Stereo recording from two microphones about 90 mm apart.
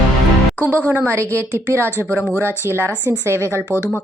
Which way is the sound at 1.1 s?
30° right (ahead or behind).